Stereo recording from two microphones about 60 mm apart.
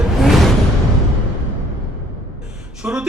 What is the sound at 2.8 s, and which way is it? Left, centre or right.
Speech, centre.